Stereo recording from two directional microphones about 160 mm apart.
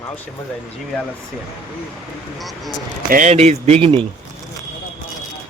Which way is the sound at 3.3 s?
40° right (ahead or behind).